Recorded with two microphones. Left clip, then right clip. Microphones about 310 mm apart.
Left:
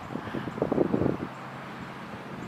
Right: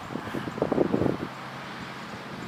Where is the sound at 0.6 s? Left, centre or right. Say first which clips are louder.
Right 1 dB; centre.